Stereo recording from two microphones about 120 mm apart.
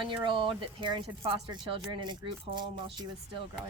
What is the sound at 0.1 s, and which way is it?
Speech, 45° right (ahead or behind).